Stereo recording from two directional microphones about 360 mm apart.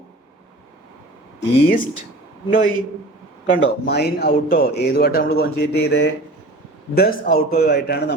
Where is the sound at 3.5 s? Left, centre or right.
Left.